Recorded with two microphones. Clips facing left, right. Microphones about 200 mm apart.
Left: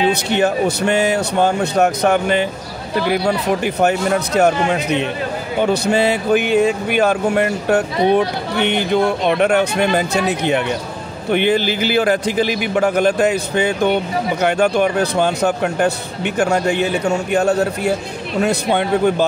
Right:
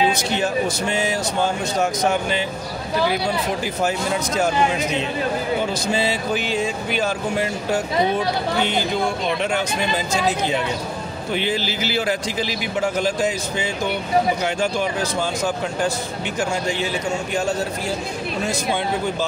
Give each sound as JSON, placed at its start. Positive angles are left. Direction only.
{"t": 0.1, "sound": "speech", "side_deg": 65}